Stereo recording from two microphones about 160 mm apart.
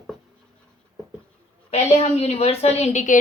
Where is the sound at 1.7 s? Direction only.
40° left (ahead or behind).